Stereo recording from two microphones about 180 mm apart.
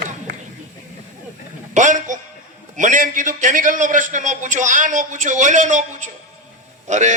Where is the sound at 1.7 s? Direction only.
45° right (ahead or behind).